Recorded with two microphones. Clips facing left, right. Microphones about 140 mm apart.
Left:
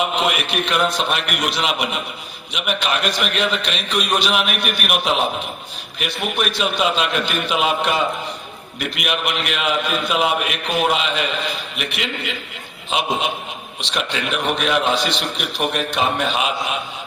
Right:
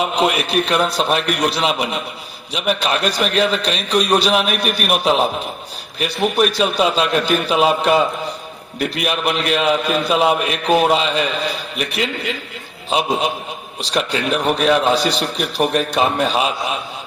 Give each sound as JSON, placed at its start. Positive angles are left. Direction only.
{"t": 0.0, "sound": "a man's voice", "side_deg": -35}